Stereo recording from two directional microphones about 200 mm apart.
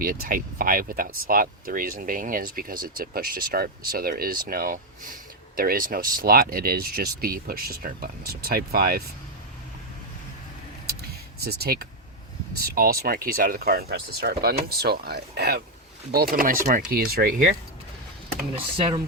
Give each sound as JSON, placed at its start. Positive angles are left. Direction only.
{"t": 0.0, "sound": "speech", "side_deg": -45}
{"t": 11.3, "sound": "speech", "side_deg": -50}
{"t": 18.5, "sound": "speech", "side_deg": -25}